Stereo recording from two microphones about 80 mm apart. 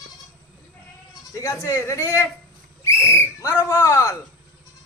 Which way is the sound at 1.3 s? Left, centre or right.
Left.